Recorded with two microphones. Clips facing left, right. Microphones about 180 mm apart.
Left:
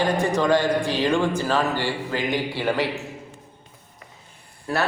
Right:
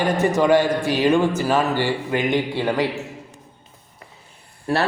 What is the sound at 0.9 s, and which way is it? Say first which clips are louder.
A man's voice: right 4 dB; 15° right (ahead or behind).